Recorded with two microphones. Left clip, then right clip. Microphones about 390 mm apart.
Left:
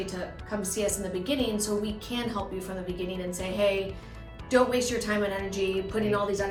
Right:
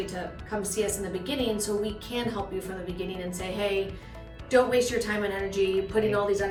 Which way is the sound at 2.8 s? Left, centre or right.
Centre.